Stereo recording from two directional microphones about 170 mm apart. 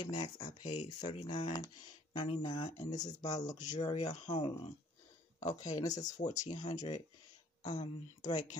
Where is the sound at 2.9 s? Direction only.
25° left (ahead or behind).